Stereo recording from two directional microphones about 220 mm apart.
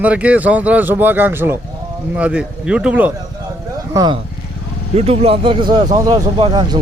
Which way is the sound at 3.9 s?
15° right (ahead or behind).